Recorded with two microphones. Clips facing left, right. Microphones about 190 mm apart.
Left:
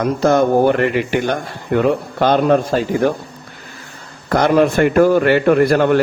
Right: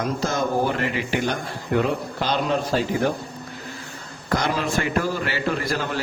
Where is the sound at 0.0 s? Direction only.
60° left (ahead or behind).